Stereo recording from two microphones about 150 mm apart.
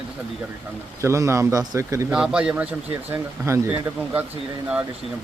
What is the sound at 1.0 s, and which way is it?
Speech, 20° right (ahead or behind).